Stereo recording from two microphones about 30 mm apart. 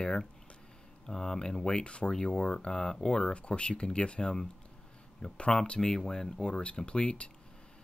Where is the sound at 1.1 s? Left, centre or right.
Left.